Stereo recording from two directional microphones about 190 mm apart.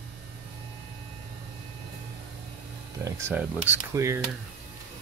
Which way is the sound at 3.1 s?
15° right (ahead or behind).